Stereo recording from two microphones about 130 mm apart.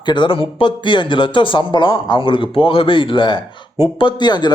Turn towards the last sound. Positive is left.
turn(degrees=35)  # may be behind; listen again after turning